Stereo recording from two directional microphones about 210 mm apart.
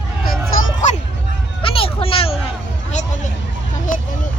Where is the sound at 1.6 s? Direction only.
25° left (ahead or behind).